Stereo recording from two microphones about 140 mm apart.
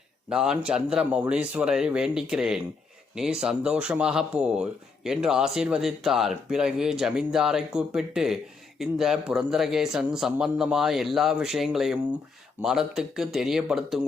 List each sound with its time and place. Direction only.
0.3 s a man's voice: 5° right (ahead or behind)